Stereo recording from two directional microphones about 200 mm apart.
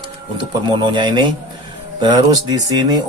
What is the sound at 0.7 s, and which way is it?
Speech, 20° right (ahead or behind).